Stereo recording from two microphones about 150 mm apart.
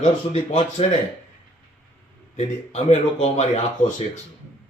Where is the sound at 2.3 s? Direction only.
45° left (ahead or behind).